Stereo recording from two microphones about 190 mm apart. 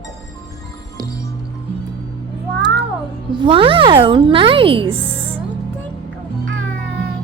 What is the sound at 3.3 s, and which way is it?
Speech, 25° right (ahead or behind).